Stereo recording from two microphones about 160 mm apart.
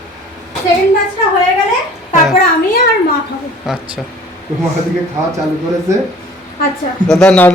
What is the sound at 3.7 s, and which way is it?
Speech, 5° right (ahead or behind).